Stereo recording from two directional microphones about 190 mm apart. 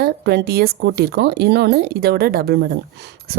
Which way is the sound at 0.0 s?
60° right (ahead or behind).